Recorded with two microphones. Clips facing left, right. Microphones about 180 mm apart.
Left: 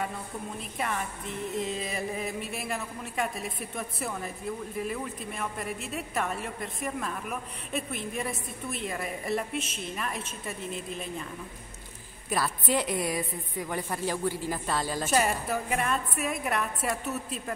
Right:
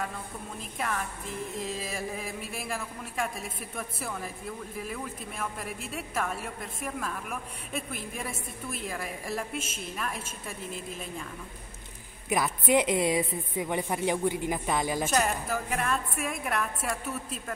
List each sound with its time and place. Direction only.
0.6 s a woman's voice: centre (ahead or behind)
12.3 s a woman's voice: 20° right (ahead or behind)
15.0 s a woman's voice: 5° left (ahead or behind)